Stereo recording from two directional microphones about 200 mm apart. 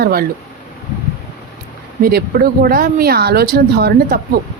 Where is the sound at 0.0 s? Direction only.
50° right (ahead or behind).